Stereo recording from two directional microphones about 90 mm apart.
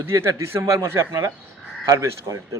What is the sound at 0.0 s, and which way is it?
A man's voice, 30° right (ahead or behind).